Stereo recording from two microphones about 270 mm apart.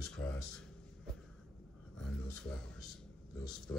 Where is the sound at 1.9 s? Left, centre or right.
Centre.